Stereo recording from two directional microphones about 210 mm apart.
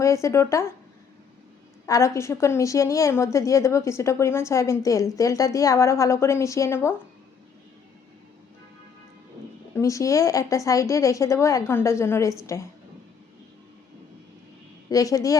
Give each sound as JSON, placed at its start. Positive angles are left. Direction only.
{"t": 0.0, "sound": "a woman's voice", "side_deg": 15}
{"t": 1.9, "sound": "a woman's voice", "side_deg": 15}
{"t": 9.7, "sound": "a woman's voice", "side_deg": 15}
{"t": 14.8, "sound": "a woman's voice", "side_deg": 15}